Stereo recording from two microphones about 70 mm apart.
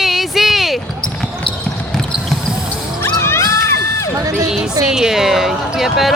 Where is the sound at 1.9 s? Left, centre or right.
Centre.